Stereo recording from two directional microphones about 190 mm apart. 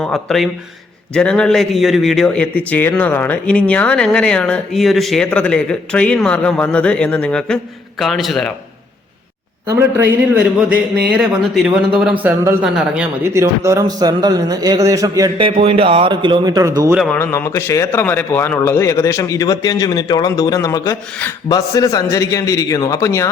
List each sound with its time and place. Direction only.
0.0 s speech: centre (ahead or behind)
9.6 s speech: 15° right (ahead or behind)
11.1 s speech: centre (ahead or behind)
17.2 s a man's voice: 15° left (ahead or behind)